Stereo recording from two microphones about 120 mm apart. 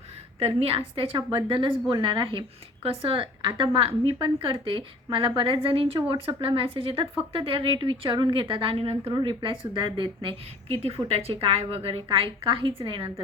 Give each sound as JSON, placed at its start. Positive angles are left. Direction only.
{"t": 0.3, "sound": "a woman's voice", "side_deg": -55}